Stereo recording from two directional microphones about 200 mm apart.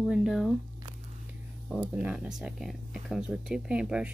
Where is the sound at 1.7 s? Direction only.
5° right (ahead or behind).